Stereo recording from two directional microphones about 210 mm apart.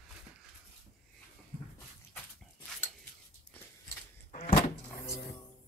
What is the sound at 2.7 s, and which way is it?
Dog, centre (ahead or behind).